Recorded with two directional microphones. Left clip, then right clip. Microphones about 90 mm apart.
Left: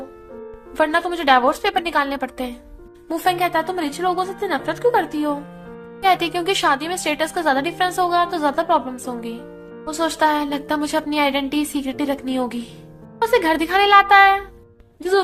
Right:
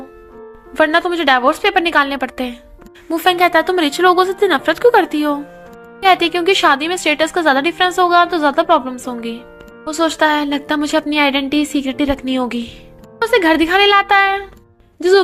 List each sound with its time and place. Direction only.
0.8 s a woman's voice: 45° right (ahead or behind)
9.8 s a woman's voice: 45° right (ahead or behind); by 14.4 s 60° right (ahead or behind)